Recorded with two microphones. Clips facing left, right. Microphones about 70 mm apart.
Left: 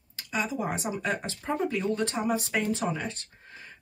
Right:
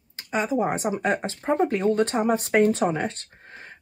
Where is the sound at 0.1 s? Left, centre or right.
Right.